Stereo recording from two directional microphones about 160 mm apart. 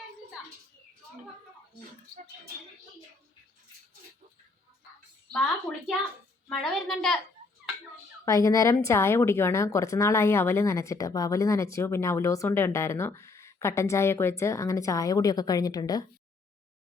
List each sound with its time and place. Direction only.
0.4 s a sound: 5° right (ahead or behind)
6.5 s a woman's voice: centre (ahead or behind)
8.2 s a woman's voice: 20° left (ahead or behind)